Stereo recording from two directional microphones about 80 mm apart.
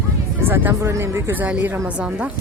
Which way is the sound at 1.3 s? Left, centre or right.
Centre.